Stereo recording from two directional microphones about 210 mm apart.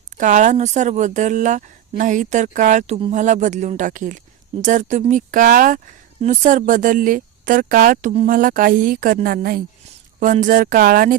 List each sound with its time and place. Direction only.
0.2 s speech: 35° right (ahead or behind)